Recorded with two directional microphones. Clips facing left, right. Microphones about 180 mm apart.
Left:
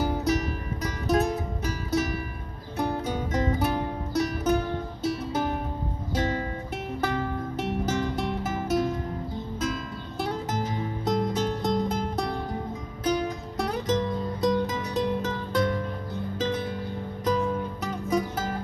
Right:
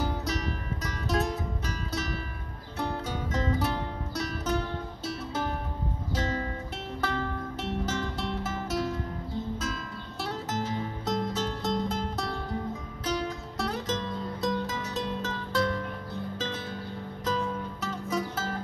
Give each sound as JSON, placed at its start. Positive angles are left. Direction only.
{"t": 0.0, "sound": "music", "side_deg": 20}
{"t": 2.8, "sound": "music", "side_deg": 20}
{"t": 10.2, "sound": "music", "side_deg": 15}
{"t": 17.8, "sound": "music", "side_deg": 15}